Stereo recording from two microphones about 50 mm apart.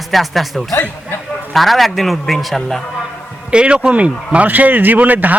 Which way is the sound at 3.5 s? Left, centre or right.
Right.